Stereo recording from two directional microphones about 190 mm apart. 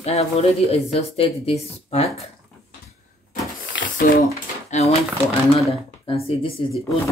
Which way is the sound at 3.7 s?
55° left (ahead or behind).